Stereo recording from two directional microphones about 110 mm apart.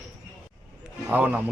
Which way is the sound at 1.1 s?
15° right (ahead or behind).